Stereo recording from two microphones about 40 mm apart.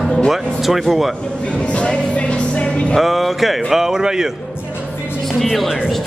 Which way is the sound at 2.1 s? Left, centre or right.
Left.